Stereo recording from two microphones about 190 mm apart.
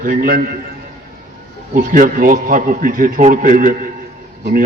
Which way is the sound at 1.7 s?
45° right (ahead or behind).